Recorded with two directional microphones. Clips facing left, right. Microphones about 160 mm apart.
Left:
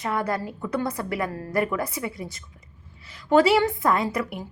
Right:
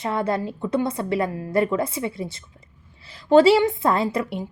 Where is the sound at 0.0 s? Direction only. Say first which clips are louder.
Right 3 dB; 25° right (ahead or behind).